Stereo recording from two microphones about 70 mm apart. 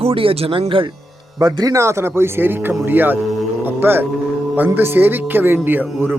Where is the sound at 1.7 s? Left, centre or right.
Right.